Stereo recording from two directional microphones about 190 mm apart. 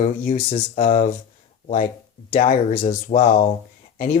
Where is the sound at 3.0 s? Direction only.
40° left (ahead or behind).